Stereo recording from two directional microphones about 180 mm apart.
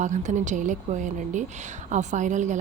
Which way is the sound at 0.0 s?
40° right (ahead or behind).